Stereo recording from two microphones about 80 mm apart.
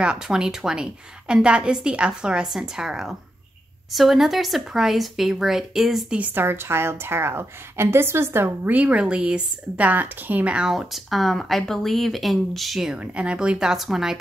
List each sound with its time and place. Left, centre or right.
0.0 s speech: centre
6.1 s a woman's voice: right
8.7 s speech: centre